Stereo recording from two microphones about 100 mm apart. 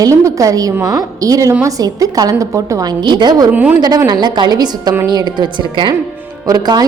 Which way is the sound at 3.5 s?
15° right (ahead or behind).